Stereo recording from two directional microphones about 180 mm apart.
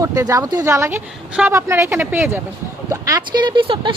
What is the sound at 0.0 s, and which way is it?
A woman's voice, 15° right (ahead or behind).